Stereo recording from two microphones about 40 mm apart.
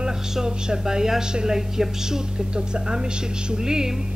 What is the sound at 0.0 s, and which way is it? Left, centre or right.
A woman's voice, centre.